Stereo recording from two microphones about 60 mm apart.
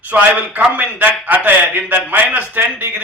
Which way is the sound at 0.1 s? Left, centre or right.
Right.